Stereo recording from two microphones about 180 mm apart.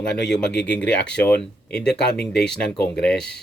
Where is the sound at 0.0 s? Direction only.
5° left (ahead or behind).